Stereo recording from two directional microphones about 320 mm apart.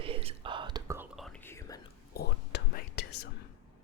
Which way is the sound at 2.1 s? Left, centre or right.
Left.